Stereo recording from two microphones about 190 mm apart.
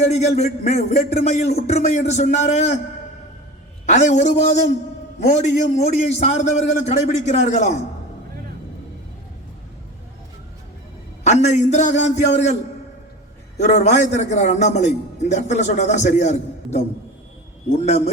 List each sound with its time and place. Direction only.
0.1 s a man's voice: 35° left (ahead or behind)
3.8 s a man's voice: 40° left (ahead or behind)
11.2 s a man's voice: 35° left (ahead or behind)
13.6 s a man's voice: 35° left (ahead or behind)